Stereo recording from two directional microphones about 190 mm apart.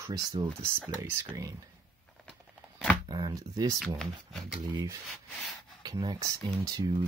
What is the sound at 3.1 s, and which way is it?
Speech, 20° right (ahead or behind).